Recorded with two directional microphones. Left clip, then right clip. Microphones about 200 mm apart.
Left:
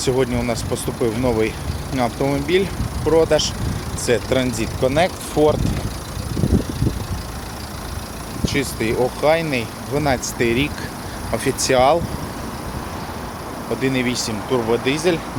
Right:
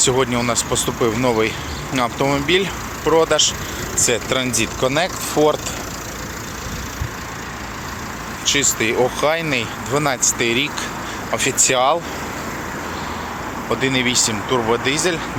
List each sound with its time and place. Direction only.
0.0 s speech: 5° left (ahead or behind)
8.4 s speech: 10° left (ahead or behind); by 11.9 s 25° left (ahead or behind)
13.8 s speech: 5° left (ahead or behind)